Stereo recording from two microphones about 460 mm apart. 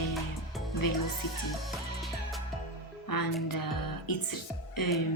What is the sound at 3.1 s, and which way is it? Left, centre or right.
Speech, left.